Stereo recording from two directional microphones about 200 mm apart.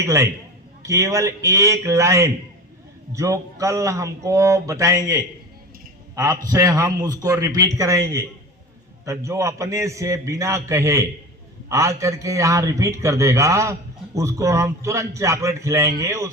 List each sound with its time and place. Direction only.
0.0 s a man's voice: 15° right (ahead or behind)